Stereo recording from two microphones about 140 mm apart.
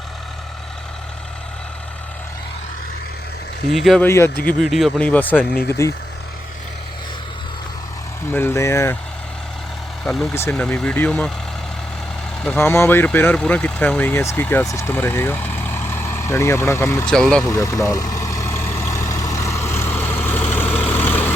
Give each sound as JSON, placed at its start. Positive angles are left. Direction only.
{"t": 3.8, "sound": "speech", "side_deg": 0}
{"t": 4.0, "sound": "speech", "side_deg": 15}
{"t": 4.6, "sound": "speech", "side_deg": 0}
{"t": 4.9, "sound": "speech", "side_deg": 10}
{"t": 8.3, "sound": "speech", "side_deg": 15}
{"t": 10.0, "sound": "speech", "side_deg": 5}
{"t": 12.4, "sound": "speech", "side_deg": 10}
{"t": 17.1, "sound": "speech", "side_deg": 5}
{"t": 17.4, "sound": "vehicle", "side_deg": 25}